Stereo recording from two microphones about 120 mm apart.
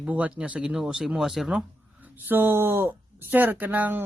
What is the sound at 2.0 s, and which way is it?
Speech, 15° right (ahead or behind).